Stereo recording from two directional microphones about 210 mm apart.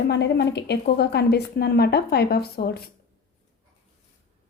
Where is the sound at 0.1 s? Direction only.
55° left (ahead or behind).